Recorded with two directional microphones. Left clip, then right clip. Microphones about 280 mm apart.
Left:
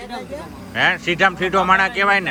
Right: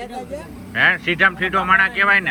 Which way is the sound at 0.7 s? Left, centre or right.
Centre.